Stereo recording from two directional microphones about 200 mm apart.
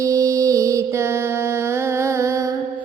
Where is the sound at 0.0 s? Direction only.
15° right (ahead or behind).